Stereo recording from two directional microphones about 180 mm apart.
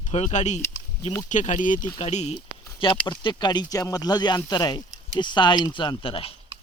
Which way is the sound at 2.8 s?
25° left (ahead or behind).